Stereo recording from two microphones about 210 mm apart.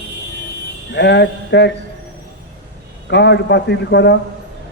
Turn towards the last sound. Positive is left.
turn(degrees=55)  # may be behind; listen again after turning